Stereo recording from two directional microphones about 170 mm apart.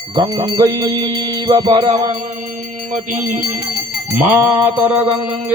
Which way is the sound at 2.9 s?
50° right (ahead or behind).